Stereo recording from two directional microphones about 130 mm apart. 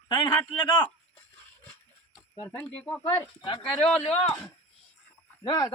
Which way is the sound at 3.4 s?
40° left (ahead or behind).